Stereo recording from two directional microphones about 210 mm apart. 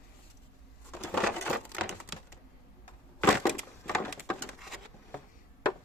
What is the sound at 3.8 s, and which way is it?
Wood, 5° left (ahead or behind).